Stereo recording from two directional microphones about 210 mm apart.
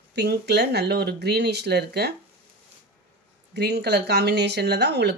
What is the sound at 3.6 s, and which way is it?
Speech, 50° right (ahead or behind).